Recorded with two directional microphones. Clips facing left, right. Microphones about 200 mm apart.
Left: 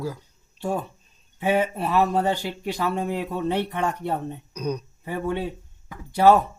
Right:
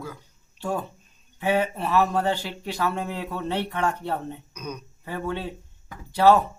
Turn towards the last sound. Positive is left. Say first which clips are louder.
# left 1 dB
turn(degrees=15)  # may be behind; listen again after turning